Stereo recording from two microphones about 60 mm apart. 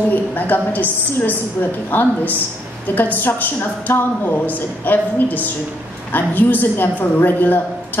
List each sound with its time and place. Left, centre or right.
0.1 s a woman's voice: left